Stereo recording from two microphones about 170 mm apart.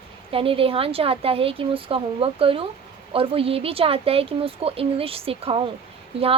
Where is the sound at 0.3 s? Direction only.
35° right (ahead or behind).